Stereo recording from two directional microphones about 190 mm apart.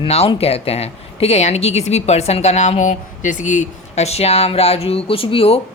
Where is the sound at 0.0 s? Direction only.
30° left (ahead or behind).